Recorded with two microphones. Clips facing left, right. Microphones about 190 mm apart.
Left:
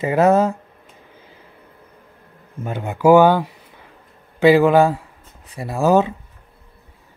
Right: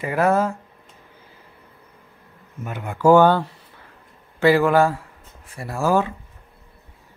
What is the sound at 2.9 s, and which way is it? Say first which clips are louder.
Speech: left 2 dB; 10° left (ahead or behind).